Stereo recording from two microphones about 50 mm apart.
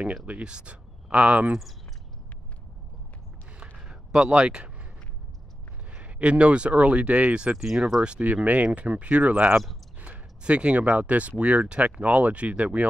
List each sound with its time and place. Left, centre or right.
0.0 s speech: right
3.5 s a sound: centre
5.9 s speech: right
7.5 s speech: centre
8.7 s speech: right